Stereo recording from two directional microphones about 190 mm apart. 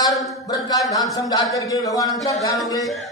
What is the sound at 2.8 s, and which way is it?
Music, centre (ahead or behind).